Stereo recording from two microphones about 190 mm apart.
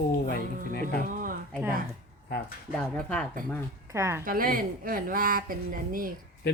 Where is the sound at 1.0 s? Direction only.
45° right (ahead or behind).